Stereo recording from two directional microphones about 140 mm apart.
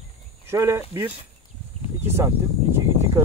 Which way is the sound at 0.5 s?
20° right (ahead or behind).